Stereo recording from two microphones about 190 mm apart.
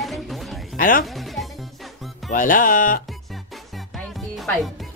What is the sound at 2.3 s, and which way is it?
Music, 45° left (ahead or behind).